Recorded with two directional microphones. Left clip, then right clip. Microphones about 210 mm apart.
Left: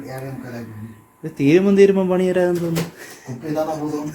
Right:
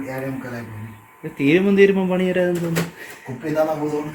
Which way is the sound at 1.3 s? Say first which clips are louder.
Left 2 dB; 15° left (ahead or behind).